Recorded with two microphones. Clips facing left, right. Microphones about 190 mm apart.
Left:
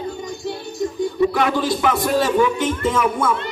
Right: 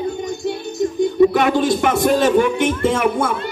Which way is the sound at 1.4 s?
60° right (ahead or behind).